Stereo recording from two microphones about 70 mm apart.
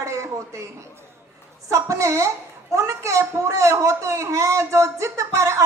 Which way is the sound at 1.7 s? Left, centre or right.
Right.